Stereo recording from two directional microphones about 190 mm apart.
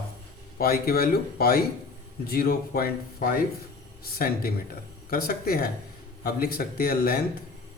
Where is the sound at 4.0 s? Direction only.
50° left (ahead or behind).